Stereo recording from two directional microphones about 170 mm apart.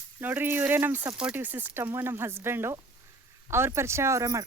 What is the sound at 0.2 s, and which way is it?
Speech, 10° right (ahead or behind).